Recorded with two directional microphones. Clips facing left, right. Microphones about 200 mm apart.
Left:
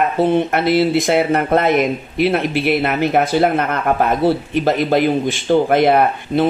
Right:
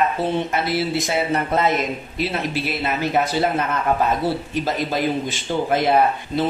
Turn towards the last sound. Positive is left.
turn(degrees=60)  # may be behind; listen again after turning